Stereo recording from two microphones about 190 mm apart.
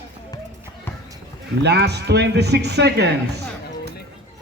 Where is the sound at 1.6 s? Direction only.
60° right (ahead or behind).